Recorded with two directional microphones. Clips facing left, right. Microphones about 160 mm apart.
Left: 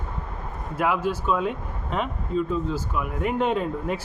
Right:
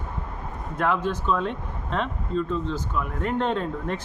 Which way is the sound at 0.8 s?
5° left (ahead or behind).